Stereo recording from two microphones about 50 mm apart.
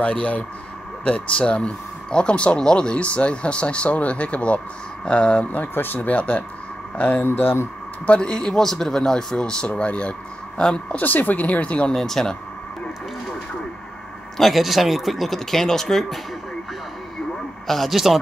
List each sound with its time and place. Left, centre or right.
0.0 s speech: left
7.2 s speech: left
8.1 s speech: centre
9.7 s speech: left
11.0 s speech: left
11.9 s speech: centre
14.3 s speech: centre
17.6 s speech: centre